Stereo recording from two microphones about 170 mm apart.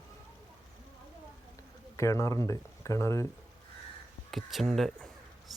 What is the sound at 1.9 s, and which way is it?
Speech, 15° left (ahead or behind).